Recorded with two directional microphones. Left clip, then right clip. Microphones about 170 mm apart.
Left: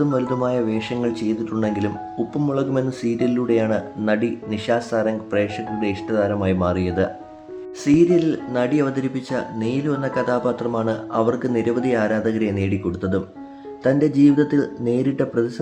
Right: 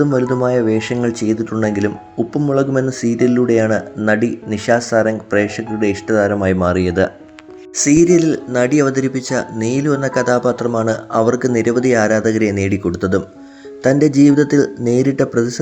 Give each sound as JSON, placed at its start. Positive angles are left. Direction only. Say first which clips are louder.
{"t": 0.0, "sound": "speech", "louder": "right 6 dB", "side_deg": -30}